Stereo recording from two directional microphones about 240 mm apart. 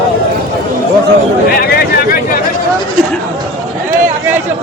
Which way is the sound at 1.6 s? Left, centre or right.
Left.